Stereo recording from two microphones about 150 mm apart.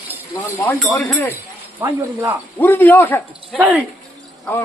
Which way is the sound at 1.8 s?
15° right (ahead or behind).